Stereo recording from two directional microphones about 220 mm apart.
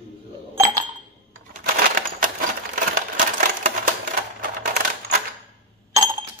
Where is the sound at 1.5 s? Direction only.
40° right (ahead or behind).